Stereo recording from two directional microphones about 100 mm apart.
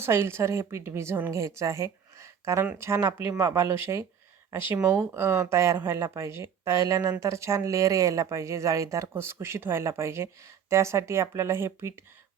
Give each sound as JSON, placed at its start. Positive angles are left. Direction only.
{"t": 0.0, "sound": "speech", "side_deg": -25}